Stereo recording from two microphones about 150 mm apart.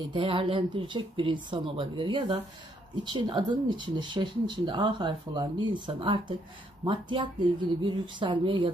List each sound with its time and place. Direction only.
0.1 s speech: 35° right (ahead or behind)